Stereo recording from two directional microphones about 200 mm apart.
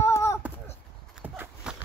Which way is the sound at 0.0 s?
15° left (ahead or behind).